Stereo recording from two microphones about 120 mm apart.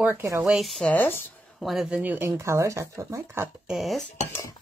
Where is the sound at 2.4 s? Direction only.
25° right (ahead or behind).